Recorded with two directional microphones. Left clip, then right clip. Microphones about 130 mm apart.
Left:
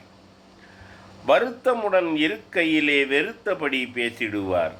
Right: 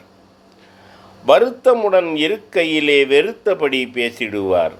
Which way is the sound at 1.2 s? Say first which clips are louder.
Right 8 dB; 45° right (ahead or behind).